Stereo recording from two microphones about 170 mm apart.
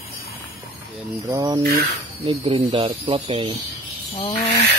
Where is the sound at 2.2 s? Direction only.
35° right (ahead or behind).